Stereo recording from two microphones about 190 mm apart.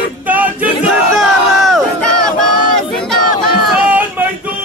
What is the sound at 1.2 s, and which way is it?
Crowd, centre (ahead or behind).